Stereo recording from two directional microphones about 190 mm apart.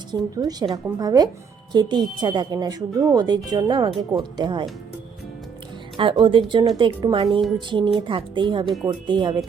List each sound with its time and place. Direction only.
0.1 s a woman's voice: 20° right (ahead or behind)
6.0 s a woman's voice: 25° right (ahead or behind)